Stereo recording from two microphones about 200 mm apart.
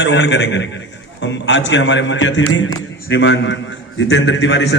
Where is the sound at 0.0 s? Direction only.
60° left (ahead or behind).